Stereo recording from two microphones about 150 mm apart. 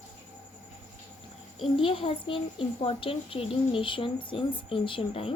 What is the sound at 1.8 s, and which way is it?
A woman's voice, 35° left (ahead or behind).